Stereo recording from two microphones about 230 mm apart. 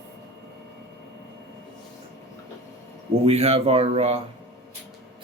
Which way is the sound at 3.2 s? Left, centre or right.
Right.